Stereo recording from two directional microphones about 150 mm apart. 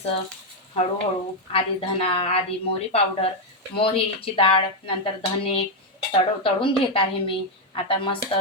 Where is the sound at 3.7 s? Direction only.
35° left (ahead or behind).